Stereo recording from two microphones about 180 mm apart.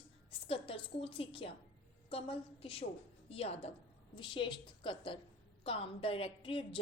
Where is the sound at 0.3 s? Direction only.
30° left (ahead or behind).